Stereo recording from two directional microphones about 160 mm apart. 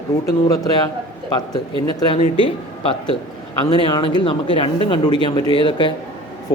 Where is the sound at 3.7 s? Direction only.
25° left (ahead or behind).